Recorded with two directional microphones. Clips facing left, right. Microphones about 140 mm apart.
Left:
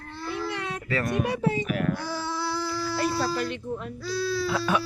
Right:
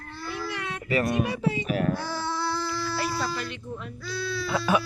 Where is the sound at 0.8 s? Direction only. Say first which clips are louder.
Right 3 dB; 15° right (ahead or behind).